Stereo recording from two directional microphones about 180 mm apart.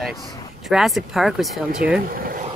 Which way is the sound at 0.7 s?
Centre (ahead or behind).